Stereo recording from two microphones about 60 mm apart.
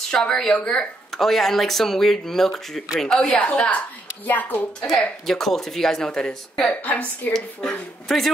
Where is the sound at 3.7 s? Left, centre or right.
Left.